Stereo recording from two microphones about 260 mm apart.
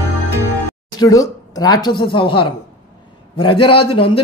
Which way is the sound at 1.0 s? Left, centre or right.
Centre.